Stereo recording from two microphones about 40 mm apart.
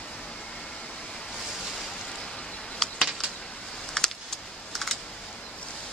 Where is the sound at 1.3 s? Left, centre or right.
Centre.